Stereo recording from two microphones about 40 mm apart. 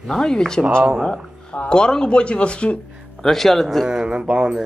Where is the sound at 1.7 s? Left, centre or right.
Centre.